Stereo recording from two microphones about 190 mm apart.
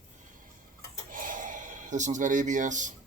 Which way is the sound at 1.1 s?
45° right (ahead or behind).